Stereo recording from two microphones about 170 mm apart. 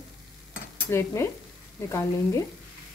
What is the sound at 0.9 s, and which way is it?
Speech, 15° left (ahead or behind).